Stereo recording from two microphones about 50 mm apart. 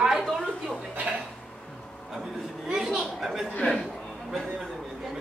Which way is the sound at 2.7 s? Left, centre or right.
Centre.